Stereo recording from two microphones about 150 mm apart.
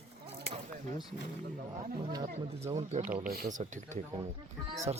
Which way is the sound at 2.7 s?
45° right (ahead or behind).